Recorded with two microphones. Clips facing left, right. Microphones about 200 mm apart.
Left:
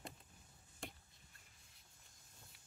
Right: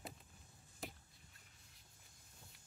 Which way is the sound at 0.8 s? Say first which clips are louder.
Right 1 dB; centre (ahead or behind).